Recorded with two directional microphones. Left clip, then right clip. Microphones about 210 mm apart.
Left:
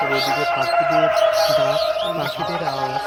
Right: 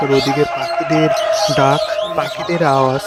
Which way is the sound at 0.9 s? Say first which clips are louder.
Right 4 dB; 35° right (ahead or behind).